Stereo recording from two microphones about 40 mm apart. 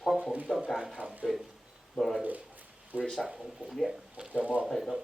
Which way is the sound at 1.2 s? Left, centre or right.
Centre.